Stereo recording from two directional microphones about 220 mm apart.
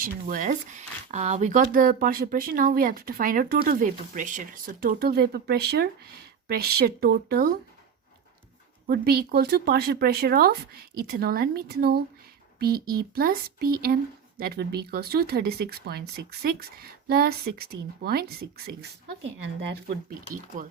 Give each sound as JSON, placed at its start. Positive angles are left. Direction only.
{"t": 0.0, "sound": "speech", "side_deg": -40}
{"t": 8.9, "sound": "speech", "side_deg": -45}